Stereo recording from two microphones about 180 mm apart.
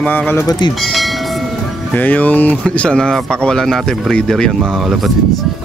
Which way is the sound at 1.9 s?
10° left (ahead or behind).